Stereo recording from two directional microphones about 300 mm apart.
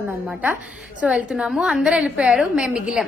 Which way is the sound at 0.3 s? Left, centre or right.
Centre.